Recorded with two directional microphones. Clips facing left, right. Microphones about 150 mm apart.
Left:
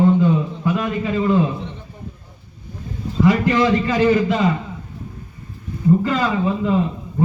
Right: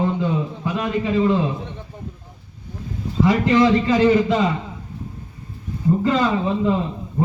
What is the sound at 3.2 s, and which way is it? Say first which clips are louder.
A man's voice: even; 25° right (ahead or behind).